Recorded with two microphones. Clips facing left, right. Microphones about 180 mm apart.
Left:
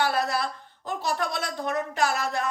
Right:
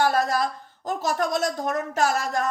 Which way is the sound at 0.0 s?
45° right (ahead or behind).